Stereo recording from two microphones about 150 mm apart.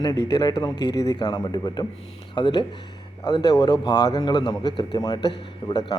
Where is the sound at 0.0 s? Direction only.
25° left (ahead or behind).